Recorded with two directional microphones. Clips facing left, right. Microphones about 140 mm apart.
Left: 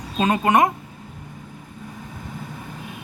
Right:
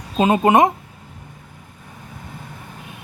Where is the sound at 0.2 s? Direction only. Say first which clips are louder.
Right 4 dB; 25° right (ahead or behind).